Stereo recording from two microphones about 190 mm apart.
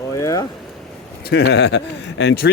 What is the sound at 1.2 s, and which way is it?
Speech, 55° left (ahead or behind).